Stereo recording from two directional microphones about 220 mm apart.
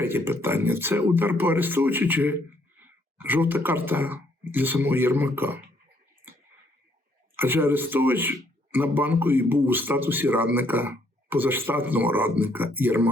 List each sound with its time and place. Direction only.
0.0 s speech: 10° right (ahead or behind)
7.3 s speech: 10° right (ahead or behind)